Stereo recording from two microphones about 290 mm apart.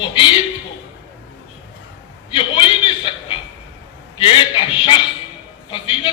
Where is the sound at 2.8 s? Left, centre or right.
Centre.